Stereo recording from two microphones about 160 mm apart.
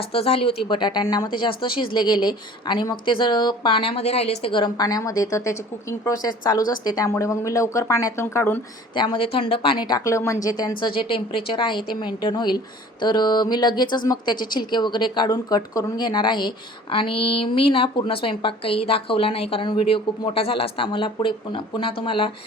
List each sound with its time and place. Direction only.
0.1 s speech: 35° left (ahead or behind); by 8.6 s 15° left (ahead or behind)
9.0 s speech: 30° left (ahead or behind)